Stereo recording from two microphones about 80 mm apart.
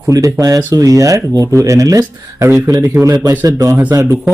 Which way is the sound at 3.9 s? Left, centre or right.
Right.